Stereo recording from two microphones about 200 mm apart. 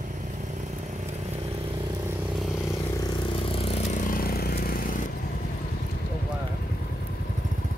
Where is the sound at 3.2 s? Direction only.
25° left (ahead or behind); by 5.0 s 45° left (ahead or behind).